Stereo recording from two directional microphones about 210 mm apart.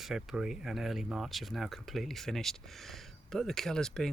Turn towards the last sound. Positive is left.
turn(degrees=5)  # may be behind; listen again after turning